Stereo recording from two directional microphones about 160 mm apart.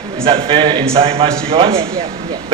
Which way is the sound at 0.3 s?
35° right (ahead or behind).